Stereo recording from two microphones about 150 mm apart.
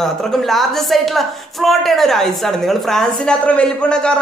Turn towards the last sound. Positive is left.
turn(degrees=5)  # may be behind; listen again after turning